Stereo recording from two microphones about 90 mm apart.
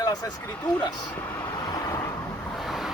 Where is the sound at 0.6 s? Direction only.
20° left (ahead or behind).